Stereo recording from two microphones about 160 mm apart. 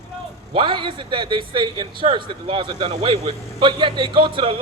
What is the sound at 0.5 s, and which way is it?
A man's voice, 30° right (ahead or behind).